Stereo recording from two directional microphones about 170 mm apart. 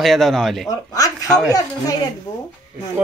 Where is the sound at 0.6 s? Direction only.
20° left (ahead or behind).